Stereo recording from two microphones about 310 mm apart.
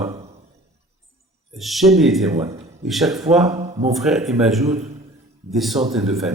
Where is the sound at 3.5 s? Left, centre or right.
Centre.